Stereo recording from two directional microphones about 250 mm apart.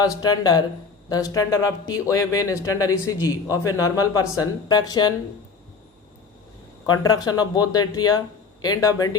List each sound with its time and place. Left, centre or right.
0.0 s speech: centre
6.8 s speech: centre